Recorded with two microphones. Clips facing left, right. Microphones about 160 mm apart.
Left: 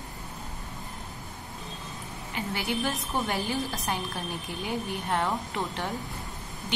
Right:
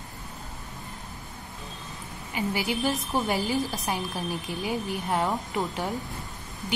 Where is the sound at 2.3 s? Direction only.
10° right (ahead or behind).